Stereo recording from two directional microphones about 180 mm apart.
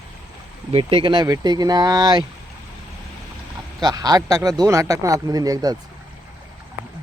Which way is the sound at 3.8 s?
20° right (ahead or behind).